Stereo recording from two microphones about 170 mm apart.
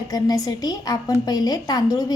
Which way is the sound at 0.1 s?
20° left (ahead or behind).